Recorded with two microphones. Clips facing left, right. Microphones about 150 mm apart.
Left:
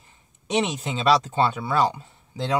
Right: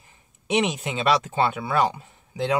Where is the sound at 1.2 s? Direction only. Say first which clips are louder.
Left 1 dB; 65° right (ahead or behind).